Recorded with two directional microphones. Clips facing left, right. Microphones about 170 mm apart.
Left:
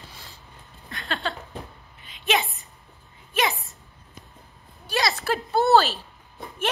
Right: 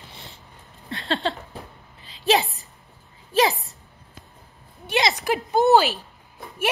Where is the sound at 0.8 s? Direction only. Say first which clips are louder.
Right 5 dB; 30° right (ahead or behind).